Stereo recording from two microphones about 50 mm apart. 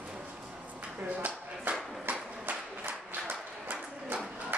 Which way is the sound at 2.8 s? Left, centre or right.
Right.